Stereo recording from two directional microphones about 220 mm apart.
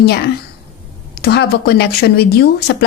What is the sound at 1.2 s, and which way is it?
Speech, 45° left (ahead or behind).